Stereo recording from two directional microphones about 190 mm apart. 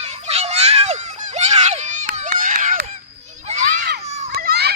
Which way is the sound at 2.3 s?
45° right (ahead or behind).